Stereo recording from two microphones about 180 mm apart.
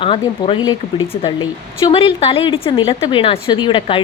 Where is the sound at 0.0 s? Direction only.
30° left (ahead or behind).